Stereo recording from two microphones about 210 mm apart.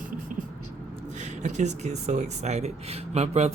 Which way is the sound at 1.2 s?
35° right (ahead or behind).